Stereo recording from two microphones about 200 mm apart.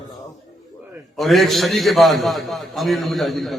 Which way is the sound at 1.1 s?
Centre (ahead or behind).